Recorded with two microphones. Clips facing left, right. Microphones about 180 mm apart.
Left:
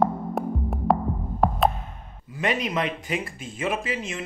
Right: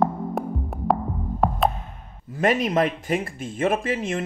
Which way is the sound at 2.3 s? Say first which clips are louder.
Right 5 dB; 45° right (ahead or behind).